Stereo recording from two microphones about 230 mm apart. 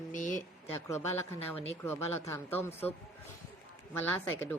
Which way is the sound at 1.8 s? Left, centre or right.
Centre.